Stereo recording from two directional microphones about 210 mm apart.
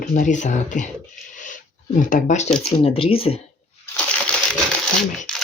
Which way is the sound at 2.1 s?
35° left (ahead or behind).